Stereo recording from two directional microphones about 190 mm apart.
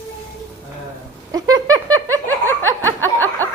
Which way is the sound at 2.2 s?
10° left (ahead or behind).